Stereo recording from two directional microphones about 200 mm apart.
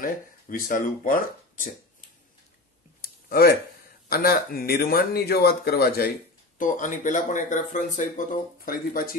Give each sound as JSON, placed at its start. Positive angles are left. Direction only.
{"t": 0.0, "sound": "speech", "side_deg": 45}
{"t": 3.0, "sound": "a sound", "side_deg": 50}
{"t": 4.1, "sound": "speech", "side_deg": 50}
{"t": 6.6, "sound": "speech", "side_deg": 40}